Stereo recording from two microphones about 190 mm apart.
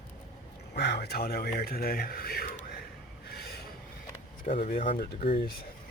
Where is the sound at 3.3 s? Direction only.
55° left (ahead or behind).